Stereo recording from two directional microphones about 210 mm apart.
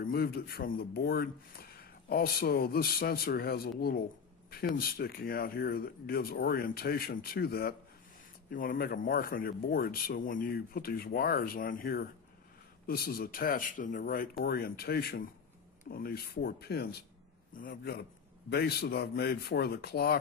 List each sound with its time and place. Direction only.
0.0 s speech: 45° left (ahead or behind)
4.7 s a man's voice: 45° left (ahead or behind)